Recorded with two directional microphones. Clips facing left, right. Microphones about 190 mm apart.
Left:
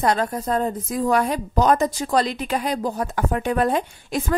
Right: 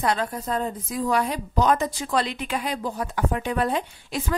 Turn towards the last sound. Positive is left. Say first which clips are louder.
# left 4 dB
turn(degrees=50)  # may be behind; listen again after turning